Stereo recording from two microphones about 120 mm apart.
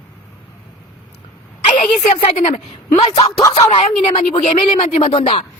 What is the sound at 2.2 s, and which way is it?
Speech, 60° left (ahead or behind).